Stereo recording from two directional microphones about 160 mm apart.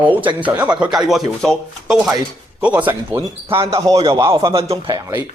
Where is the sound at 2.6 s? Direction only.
10° right (ahead or behind); by 4.8 s 40° right (ahead or behind).